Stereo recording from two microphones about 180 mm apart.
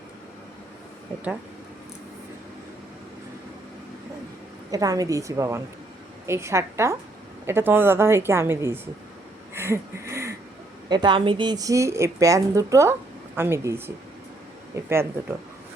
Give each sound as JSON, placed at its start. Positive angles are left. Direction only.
{"t": 4.7, "sound": "a woman's voice", "side_deg": -20}
{"t": 9.6, "sound": "a sound", "side_deg": -15}
{"t": 10.8, "sound": "a woman's voice", "side_deg": -25}